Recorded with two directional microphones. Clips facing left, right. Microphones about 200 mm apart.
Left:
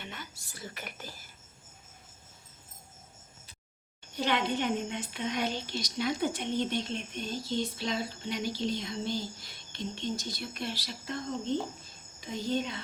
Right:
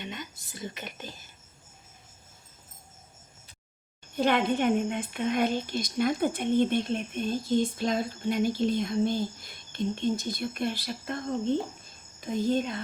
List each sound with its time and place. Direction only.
0.0 s whispering: 20° right (ahead or behind)
4.1 s a woman's voice: 50° right (ahead or behind)